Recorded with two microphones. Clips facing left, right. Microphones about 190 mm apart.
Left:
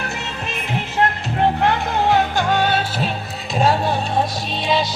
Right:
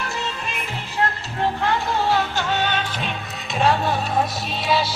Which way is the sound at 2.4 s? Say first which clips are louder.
Left 5 dB; 45° left (ahead or behind).